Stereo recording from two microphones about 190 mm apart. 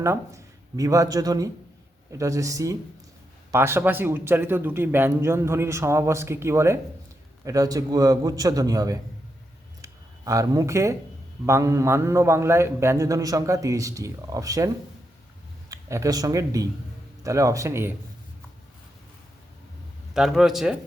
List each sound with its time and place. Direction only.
0.0 s a man's voice: 15° right (ahead or behind)
9.8 s a sound: 20° right (ahead or behind)
11.4 s a man's voice: 15° right (ahead or behind)
15.7 s a man's voice: 15° right (ahead or behind)
20.1 s speech: centre (ahead or behind)